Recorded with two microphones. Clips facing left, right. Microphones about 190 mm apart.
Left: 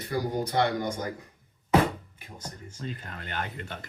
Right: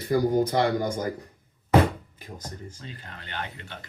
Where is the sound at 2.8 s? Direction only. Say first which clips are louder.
Left 5 dB; 45° left (ahead or behind).